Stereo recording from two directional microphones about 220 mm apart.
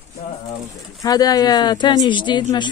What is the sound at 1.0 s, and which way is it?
Speech, 15° left (ahead or behind).